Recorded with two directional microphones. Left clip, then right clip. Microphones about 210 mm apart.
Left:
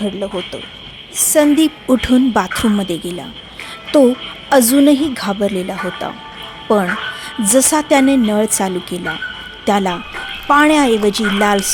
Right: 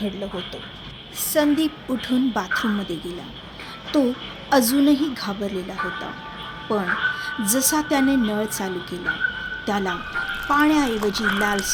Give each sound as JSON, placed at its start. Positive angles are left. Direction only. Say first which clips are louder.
{"t": 0.0, "sound": "speech", "louder": "left 8 dB", "side_deg": 40}